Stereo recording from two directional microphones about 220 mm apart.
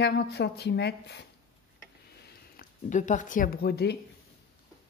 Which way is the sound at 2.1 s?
40° left (ahead or behind).